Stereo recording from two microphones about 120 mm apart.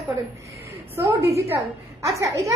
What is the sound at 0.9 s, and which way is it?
A woman's voice, 25° right (ahead or behind).